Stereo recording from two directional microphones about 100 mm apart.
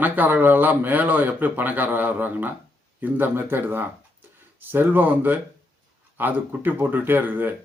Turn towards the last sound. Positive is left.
turn(degrees=-15)  # may be behind; listen again after turning